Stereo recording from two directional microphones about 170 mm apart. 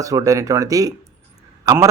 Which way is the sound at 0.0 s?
20° right (ahead or behind).